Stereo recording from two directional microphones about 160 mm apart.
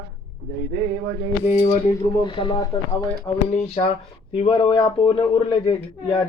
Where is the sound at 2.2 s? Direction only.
30° left (ahead or behind).